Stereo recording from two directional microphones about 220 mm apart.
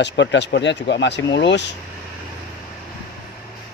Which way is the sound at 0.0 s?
55° left (ahead or behind).